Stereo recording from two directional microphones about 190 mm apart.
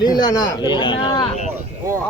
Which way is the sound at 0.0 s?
20° left (ahead or behind).